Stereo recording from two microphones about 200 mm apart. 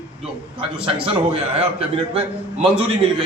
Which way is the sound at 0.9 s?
30° right (ahead or behind).